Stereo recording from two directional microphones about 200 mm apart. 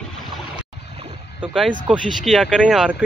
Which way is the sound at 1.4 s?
5° right (ahead or behind).